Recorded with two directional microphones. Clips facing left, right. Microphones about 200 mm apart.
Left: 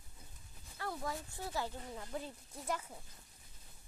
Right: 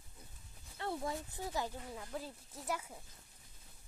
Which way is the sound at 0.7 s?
25° right (ahead or behind).